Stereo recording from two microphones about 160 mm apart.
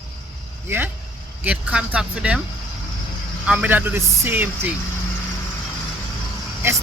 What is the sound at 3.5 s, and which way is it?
Speech, 10° right (ahead or behind).